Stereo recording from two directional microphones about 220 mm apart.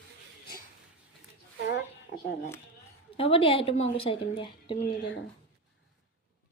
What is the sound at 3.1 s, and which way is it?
A woman's voice, 25° left (ahead or behind).